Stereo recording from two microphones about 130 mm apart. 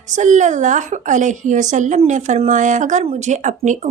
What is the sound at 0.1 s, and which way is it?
A woman's voice, 70° right (ahead or behind).